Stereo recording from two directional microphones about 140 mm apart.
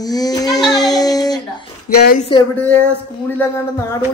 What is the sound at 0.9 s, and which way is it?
Speech, 25° left (ahead or behind).